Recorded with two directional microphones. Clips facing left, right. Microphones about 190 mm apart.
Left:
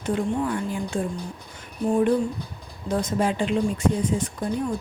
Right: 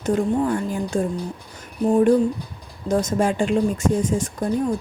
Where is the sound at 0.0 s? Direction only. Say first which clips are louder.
Right 4 dB; 40° right (ahead or behind).